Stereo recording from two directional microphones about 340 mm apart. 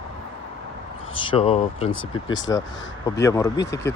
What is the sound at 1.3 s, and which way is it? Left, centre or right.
Speech, centre.